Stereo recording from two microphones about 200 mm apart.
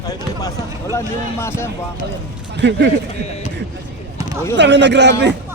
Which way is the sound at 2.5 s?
60° right (ahead or behind).